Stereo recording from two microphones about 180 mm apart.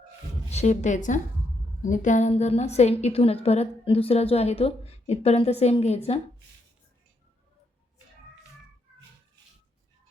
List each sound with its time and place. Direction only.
0.5 s a woman's voice: 40° left (ahead or behind)